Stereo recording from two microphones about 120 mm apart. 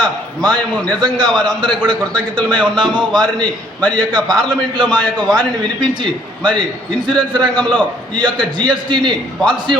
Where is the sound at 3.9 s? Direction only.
35° right (ahead or behind).